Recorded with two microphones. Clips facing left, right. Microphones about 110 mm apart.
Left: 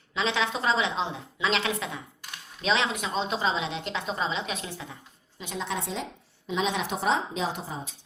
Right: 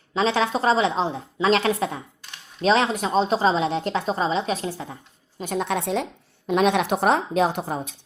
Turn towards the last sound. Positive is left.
turn(degrees=-60)  # may be behind; listen again after turning